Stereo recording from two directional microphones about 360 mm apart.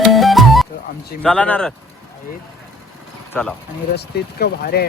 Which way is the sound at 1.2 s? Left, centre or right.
Centre.